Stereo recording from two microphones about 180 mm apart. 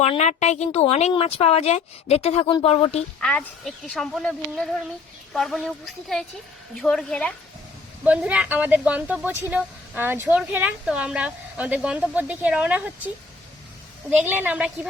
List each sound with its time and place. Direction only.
0.0 s speech: 40° left (ahead or behind)
3.2 s speech: 5° left (ahead or behind)
8.0 s speech: 5° right (ahead or behind)
14.1 s speech: 10° right (ahead or behind)